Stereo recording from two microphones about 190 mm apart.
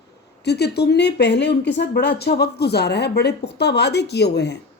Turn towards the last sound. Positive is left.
turn(degrees=60)  # may be behind; listen again after turning